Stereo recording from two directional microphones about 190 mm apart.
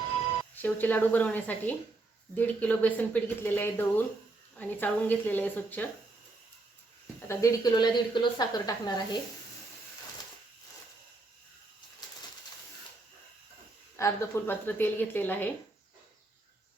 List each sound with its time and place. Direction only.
0.5 s a woman's voice: 10° left (ahead or behind)
7.3 s a woman's voice: 20° left (ahead or behind)
13.9 s a woman's voice: 15° left (ahead or behind)